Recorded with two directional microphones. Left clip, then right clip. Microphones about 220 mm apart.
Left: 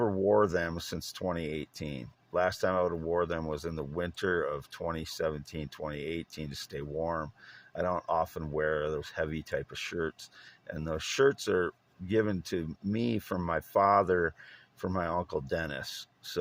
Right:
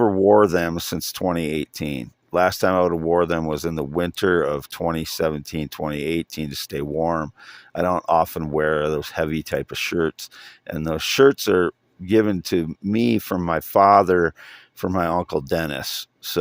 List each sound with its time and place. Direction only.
0.0 s speech: 50° right (ahead or behind)